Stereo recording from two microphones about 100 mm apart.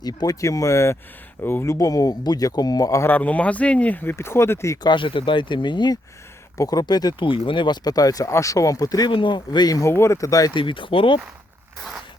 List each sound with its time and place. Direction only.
0.0 s speech: 40° left (ahead or behind)
3.0 s speech: 15° left (ahead or behind)
4.8 s speech: 50° left (ahead or behind)
6.6 s speech: 40° left (ahead or behind)
7.3 s speech: 55° left (ahead or behind); by 9.1 s 40° left (ahead or behind)
9.1 s speech: 55° left (ahead or behind)
9.9 s speech: 25° left (ahead or behind)
10.5 s speech: 55° left (ahead or behind)